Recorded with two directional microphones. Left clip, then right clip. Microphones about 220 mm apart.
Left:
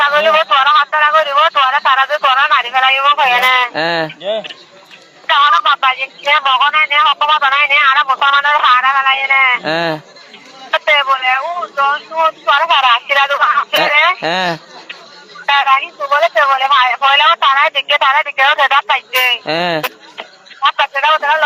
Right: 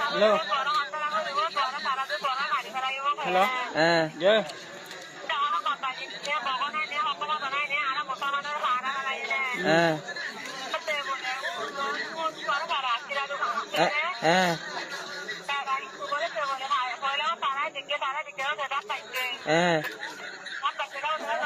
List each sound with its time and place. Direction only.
0.1 s a sound: 45° left (ahead or behind)
5.3 s speech: 45° left (ahead or behind)
10.7 s vehicle: 45° left (ahead or behind)
12.1 s speech: 45° left (ahead or behind)